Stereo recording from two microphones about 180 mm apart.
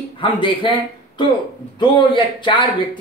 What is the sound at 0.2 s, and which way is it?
Speech, 30° left (ahead or behind).